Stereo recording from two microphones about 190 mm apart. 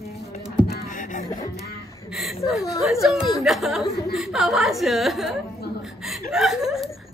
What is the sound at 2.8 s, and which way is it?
Speech, centre (ahead or behind).